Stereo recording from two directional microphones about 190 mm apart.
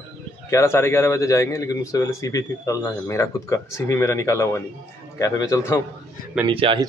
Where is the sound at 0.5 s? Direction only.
15° left (ahead or behind).